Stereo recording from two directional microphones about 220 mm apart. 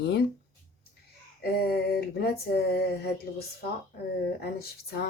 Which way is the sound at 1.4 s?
45° left (ahead or behind).